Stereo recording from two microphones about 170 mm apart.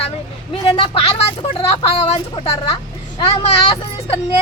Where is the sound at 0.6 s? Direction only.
30° left (ahead or behind).